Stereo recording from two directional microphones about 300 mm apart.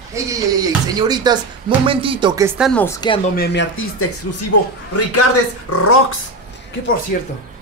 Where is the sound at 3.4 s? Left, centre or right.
Left.